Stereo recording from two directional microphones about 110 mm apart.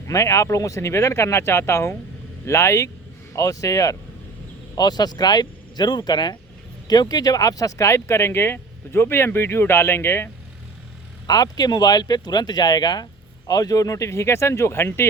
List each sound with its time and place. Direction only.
0.1 s speech: 30° left (ahead or behind)
11.3 s speech: 35° left (ahead or behind)